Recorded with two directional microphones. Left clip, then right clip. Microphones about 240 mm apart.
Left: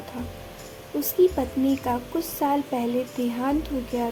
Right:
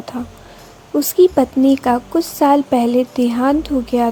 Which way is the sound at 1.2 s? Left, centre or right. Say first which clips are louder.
Right 9 dB; right.